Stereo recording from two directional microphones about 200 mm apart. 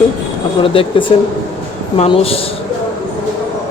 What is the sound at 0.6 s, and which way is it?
Speech, 25° left (ahead or behind).